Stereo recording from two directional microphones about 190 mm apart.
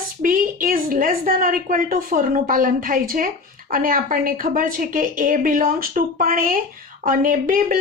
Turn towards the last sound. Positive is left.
turn(degrees=-45)  # may be behind; listen again after turning